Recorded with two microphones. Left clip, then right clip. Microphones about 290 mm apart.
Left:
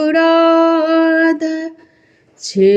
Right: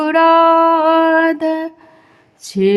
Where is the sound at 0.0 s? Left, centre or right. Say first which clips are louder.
Right 1 dB; centre.